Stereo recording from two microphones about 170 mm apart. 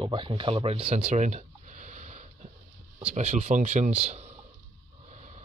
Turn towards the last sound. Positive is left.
turn(degrees=-40)  # may be behind; listen again after turning